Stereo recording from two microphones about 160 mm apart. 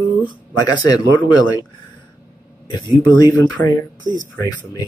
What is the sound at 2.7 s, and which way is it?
Speech, 30° left (ahead or behind).